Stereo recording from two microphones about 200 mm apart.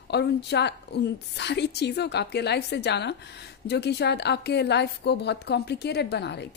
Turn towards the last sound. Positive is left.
turn(degrees=55)  # may be behind; listen again after turning